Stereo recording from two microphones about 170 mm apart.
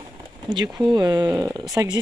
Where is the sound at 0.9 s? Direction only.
25° right (ahead or behind).